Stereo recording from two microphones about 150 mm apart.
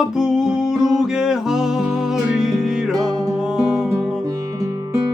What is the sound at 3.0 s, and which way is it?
Music, 25° right (ahead or behind).